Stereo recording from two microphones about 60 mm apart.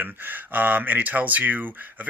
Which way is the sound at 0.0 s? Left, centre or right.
Right.